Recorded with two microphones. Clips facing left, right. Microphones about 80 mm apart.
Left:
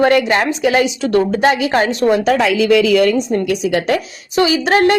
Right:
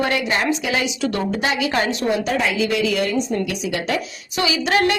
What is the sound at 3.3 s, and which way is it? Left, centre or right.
Speech, left.